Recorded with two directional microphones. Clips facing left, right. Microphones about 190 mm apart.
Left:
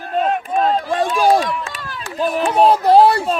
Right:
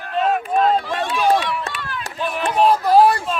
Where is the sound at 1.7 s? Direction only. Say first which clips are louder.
Right 1 dB; 40° left (ahead or behind).